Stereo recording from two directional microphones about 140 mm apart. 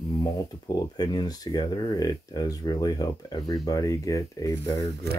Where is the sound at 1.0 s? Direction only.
30° left (ahead or behind).